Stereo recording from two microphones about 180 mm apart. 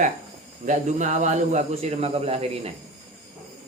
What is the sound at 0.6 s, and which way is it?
Speech, 45° right (ahead or behind).